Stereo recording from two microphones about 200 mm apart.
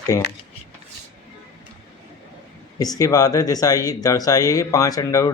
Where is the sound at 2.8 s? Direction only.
15° left (ahead or behind).